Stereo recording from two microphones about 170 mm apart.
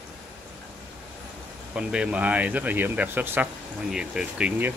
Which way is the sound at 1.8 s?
5° right (ahead or behind).